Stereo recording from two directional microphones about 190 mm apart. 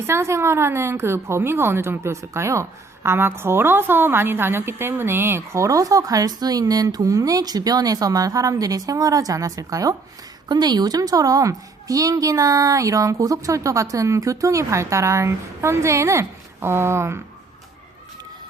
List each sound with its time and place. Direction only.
0.1 s a woman's voice: 15° right (ahead or behind)